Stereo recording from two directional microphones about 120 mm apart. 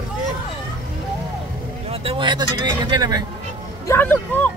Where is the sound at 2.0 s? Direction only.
45° right (ahead or behind).